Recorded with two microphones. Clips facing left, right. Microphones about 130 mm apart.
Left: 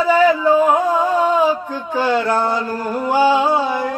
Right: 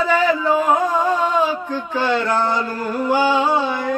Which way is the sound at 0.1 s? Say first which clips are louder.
Left 6 dB; 10° left (ahead or behind).